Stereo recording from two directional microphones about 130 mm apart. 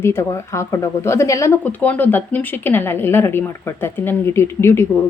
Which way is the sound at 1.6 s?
15° left (ahead or behind).